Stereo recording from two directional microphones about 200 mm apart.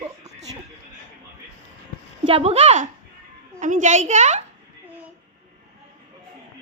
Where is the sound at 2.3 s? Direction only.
30° right (ahead or behind).